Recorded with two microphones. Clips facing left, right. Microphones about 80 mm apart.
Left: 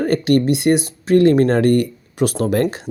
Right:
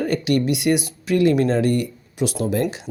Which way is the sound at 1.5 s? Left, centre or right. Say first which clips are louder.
Left 5 dB; left.